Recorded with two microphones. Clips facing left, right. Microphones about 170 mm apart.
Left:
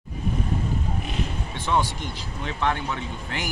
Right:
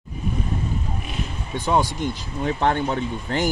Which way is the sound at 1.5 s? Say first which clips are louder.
Right 5 dB; 40° right (ahead or behind).